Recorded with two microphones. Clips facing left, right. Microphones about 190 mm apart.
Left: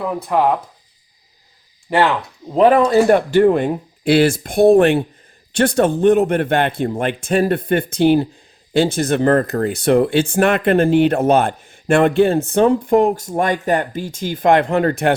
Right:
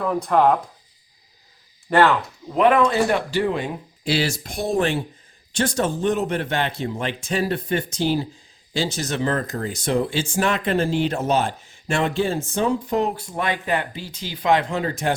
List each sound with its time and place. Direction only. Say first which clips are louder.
0.0 s speech: left 1 dB; 5° left (ahead or behind)
1.9 s speech: left 1 dB; 15° left (ahead or behind)
2.5 s speech: left 5 dB; 35° left (ahead or behind); by 15.1 s 60° left (ahead or behind)